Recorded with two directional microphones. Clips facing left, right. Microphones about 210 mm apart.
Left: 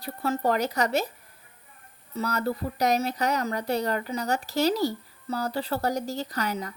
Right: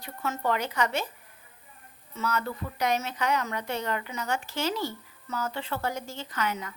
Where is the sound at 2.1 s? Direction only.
35° left (ahead or behind).